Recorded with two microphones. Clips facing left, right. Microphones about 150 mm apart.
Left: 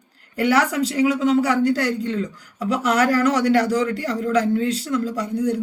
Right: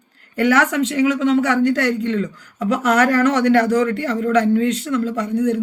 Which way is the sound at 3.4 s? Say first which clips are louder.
Right 3 dB; 55° right (ahead or behind).